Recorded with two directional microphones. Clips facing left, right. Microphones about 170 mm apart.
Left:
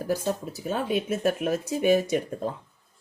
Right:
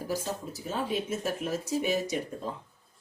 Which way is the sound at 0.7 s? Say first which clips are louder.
Left 5 dB; 65° left (ahead or behind).